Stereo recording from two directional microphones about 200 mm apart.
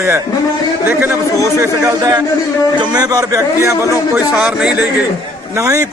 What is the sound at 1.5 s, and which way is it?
A man's voice, 15° right (ahead or behind).